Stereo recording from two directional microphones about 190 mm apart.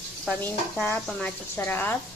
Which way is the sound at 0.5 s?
10° left (ahead or behind).